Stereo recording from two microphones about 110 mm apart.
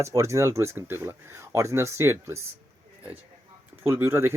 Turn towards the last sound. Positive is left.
turn(degrees=-25)  # may be behind; listen again after turning